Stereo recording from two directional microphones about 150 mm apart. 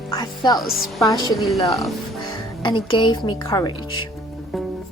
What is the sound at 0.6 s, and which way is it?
Speech, centre (ahead or behind).